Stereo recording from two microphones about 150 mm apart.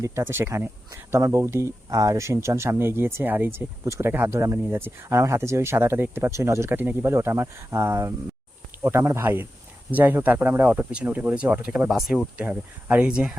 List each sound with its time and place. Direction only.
0.0 s speech: 20° right (ahead or behind)